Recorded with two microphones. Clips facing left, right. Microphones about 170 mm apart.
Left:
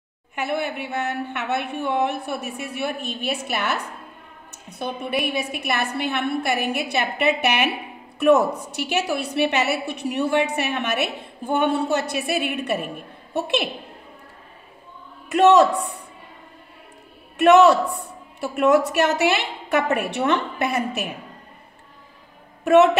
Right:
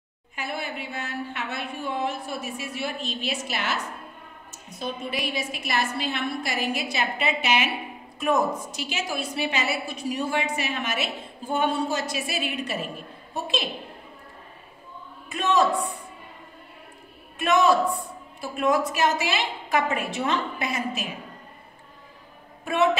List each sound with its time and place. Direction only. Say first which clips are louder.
0.4 s a woman's voice: left 7 dB; 65° left (ahead or behind)
15.2 s a man's voice: left 8 dB; 75° left (ahead or behind)
17.4 s a woman's voice: left 7 dB; 70° left (ahead or behind)